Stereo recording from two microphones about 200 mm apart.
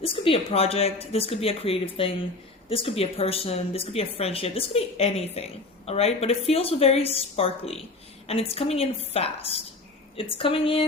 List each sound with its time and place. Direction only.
0.0 s speech: 30° left (ahead or behind)